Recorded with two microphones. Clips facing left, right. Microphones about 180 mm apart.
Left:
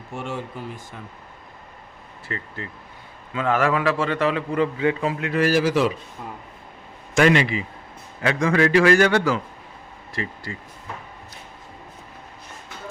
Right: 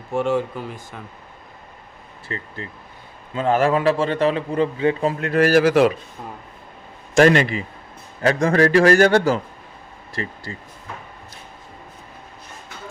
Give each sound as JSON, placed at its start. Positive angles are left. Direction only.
{"t": 0.2, "sound": "speech", "side_deg": -90}
{"t": 2.2, "sound": "a man's voice", "side_deg": -25}
{"t": 7.2, "sound": "a man's voice", "side_deg": -40}